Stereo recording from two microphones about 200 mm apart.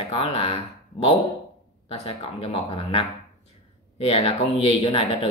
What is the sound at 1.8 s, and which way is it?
Speech, 30° left (ahead or behind).